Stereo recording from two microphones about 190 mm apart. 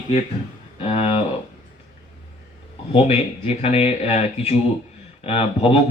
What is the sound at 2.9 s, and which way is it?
Speech, 30° left (ahead or behind).